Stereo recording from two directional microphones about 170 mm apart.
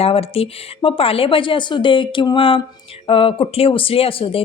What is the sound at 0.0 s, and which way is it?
A woman's voice, 35° left (ahead or behind).